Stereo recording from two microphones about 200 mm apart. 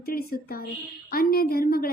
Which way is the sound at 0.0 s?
50° left (ahead or behind).